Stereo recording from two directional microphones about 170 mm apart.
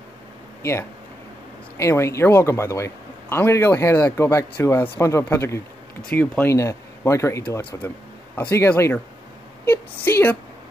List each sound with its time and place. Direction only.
0.6 s speech: 15° left (ahead or behind)